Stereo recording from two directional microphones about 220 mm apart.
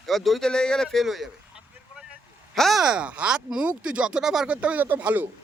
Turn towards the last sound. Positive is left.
turn(degrees=-5)  # may be behind; listen again after turning